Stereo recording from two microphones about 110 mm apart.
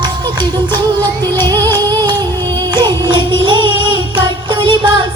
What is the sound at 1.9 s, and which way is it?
Music, 40° right (ahead or behind).